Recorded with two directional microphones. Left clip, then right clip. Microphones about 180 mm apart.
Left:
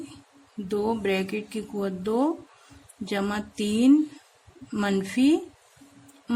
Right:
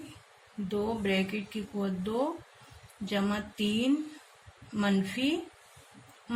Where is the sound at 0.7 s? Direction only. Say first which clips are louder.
Left 5 dB; 40° left (ahead or behind).